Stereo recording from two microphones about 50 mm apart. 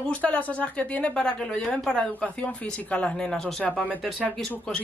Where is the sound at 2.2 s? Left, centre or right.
Left.